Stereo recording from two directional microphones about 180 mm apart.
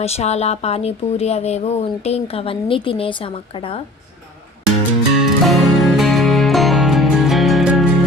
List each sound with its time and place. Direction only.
0.0 s speech: 35° left (ahead or behind)
5.2 s music: centre (ahead or behind)